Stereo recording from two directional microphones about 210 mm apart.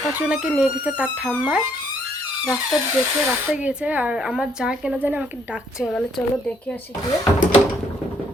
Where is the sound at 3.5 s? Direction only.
5° right (ahead or behind).